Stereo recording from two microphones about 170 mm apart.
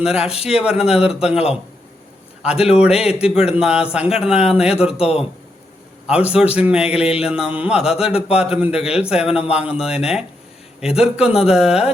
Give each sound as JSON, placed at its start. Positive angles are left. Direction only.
{"t": 0.0, "sound": "a man's voice", "side_deg": -5}
{"t": 6.1, "sound": "a man's voice", "side_deg": -5}